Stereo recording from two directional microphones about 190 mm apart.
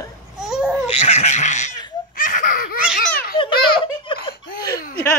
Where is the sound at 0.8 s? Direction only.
35° left (ahead or behind).